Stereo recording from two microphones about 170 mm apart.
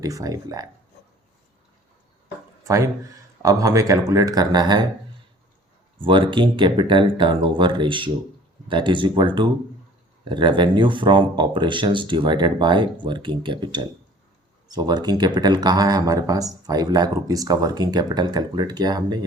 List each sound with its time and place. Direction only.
0.0 s speech: 20° right (ahead or behind)
2.6 s speech: 20° right (ahead or behind)
6.0 s speech: 30° right (ahead or behind)